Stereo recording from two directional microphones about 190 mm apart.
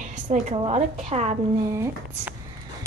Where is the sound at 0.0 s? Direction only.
40° right (ahead or behind).